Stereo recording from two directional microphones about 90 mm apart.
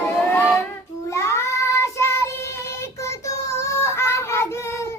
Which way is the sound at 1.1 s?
30° left (ahead or behind).